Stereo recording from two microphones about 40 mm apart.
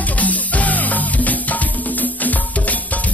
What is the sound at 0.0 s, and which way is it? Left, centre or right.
Music, left.